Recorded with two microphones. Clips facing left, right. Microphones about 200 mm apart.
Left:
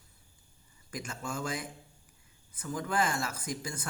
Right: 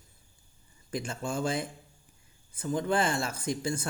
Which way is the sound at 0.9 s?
30° right (ahead or behind).